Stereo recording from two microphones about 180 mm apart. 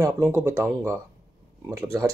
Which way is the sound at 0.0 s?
10° right (ahead or behind).